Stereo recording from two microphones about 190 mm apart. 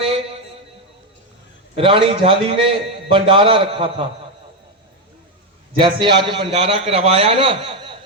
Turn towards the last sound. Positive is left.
turn(degrees=-25)  # may be behind; listen again after turning